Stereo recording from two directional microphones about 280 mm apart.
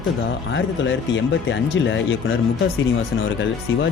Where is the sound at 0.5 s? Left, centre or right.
Left.